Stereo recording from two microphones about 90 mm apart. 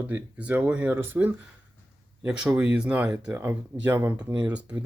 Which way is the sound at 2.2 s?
10° right (ahead or behind).